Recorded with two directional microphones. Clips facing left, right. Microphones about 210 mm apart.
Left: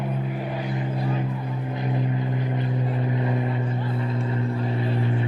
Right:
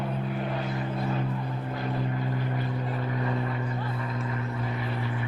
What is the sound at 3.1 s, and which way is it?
Vehicle, 20° left (ahead or behind).